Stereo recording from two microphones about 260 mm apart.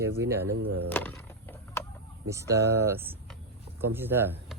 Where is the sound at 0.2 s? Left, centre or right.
Centre.